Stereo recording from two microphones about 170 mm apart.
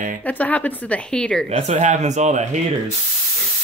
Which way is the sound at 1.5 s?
40° right (ahead or behind).